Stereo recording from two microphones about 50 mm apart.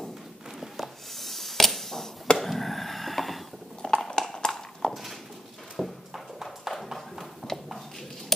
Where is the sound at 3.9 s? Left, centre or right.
Centre.